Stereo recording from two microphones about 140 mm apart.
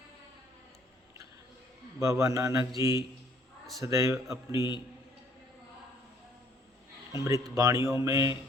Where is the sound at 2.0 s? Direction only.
20° right (ahead or behind).